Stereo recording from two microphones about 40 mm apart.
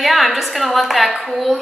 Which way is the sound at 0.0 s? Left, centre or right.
Centre.